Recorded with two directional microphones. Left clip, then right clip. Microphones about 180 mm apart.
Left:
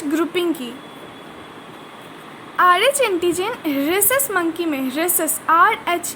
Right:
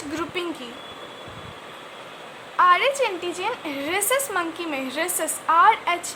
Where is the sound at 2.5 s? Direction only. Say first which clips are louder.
Left 3 dB; 25° left (ahead or behind).